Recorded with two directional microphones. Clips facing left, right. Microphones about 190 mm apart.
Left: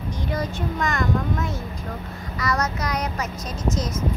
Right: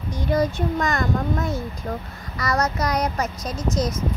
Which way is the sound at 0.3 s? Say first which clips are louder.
Right 7 dB; 35° right (ahead or behind).